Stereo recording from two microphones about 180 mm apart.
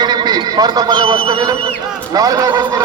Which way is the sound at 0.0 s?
25° right (ahead or behind).